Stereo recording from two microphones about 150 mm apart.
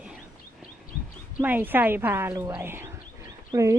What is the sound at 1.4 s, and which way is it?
Speech, 10° right (ahead or behind).